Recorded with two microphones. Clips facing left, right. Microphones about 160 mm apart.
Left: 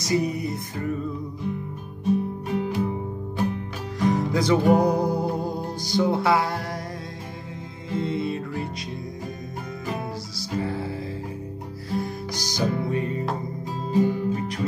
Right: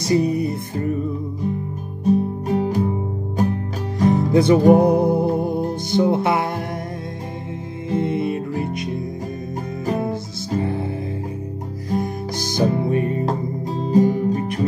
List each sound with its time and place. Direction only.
0.0 s music: 30° right (ahead or behind)
2.0 s music: 40° right (ahead or behind)
4.1 s music: 25° right (ahead or behind)
7.9 s music: 20° right (ahead or behind)
10.6 s music: 20° right (ahead or behind)
11.9 s music: 50° right (ahead or behind)
12.8 s music: 20° right (ahead or behind)
13.2 s music: 40° right (ahead or behind)